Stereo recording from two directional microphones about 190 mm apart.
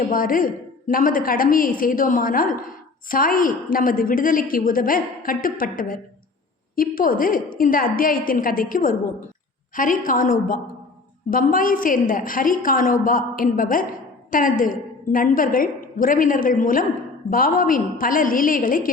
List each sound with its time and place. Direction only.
0.1 s a woman's voice: 45° left (ahead or behind)